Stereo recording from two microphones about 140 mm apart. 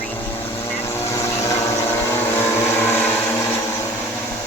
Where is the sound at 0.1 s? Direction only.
15° left (ahead or behind).